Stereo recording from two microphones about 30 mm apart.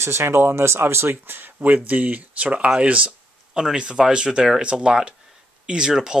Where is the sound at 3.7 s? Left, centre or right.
Right.